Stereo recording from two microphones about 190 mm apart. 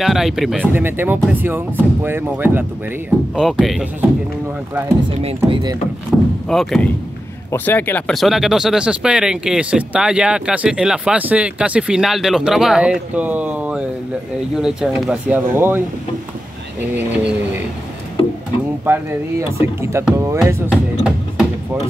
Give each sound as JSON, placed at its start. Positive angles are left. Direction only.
{"t": 0.0, "sound": "speech", "side_deg": 0}
{"t": 3.3, "sound": "speech", "side_deg": 0}
{"t": 5.2, "sound": "speech", "side_deg": -30}
{"t": 6.1, "sound": "speech", "side_deg": 5}
{"t": 16.9, "sound": "speech", "side_deg": -5}
{"t": 18.9, "sound": "speech", "side_deg": -10}
{"t": 20.4, "sound": "music", "side_deg": -10}